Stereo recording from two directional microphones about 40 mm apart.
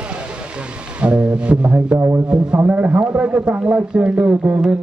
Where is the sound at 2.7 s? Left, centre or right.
Right.